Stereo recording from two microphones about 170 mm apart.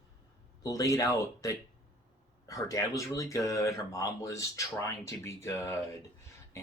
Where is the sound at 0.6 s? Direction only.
20° left (ahead or behind).